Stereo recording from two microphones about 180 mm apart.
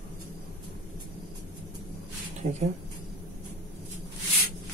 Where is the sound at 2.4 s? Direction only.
50° right (ahead or behind).